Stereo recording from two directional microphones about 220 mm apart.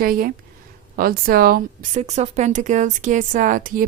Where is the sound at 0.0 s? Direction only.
40° right (ahead or behind).